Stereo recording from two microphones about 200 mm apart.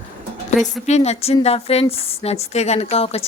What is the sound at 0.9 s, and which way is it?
Speech, 35° left (ahead or behind).